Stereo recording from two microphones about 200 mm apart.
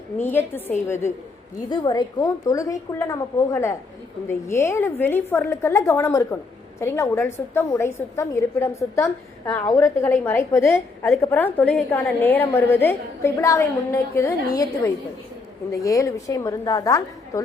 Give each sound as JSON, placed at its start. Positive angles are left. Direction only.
{"t": 0.2, "sound": "a woman's voice", "side_deg": 10}
{"t": 15.7, "sound": "a woman's voice", "side_deg": 15}